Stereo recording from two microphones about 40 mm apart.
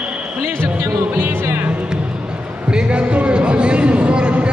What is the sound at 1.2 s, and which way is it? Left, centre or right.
Speech, right.